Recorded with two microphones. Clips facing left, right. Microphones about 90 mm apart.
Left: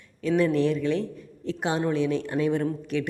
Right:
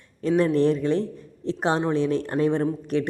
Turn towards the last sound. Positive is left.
turn(degrees=-35)  # may be behind; listen again after turning